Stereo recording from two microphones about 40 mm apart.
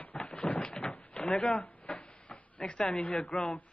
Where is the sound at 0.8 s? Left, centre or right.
Left.